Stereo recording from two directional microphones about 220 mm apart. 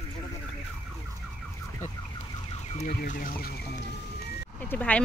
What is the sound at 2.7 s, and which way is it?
Chicken, 40° left (ahead or behind).